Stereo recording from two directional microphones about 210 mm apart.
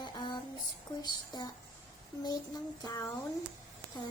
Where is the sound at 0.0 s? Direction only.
20° left (ahead or behind).